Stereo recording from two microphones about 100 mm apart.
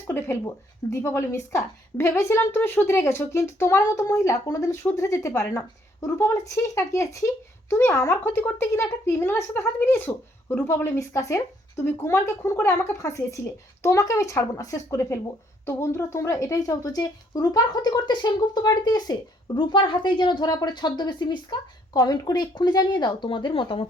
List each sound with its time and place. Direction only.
0.1 s speech: 25° left (ahead or behind); by 19.1 s 40° left (ahead or behind)
19.5 s speech: 55° left (ahead or behind)
21.9 s speech: 40° left (ahead or behind); by 23.9 s 60° left (ahead or behind)